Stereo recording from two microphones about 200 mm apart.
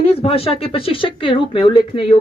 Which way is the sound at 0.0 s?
30° left (ahead or behind).